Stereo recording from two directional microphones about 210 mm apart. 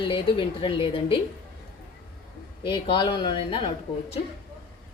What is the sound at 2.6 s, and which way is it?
A woman's voice, 25° left (ahead or behind).